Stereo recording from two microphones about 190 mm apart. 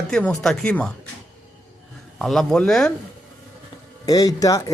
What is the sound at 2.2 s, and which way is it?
Speech, centre (ahead or behind).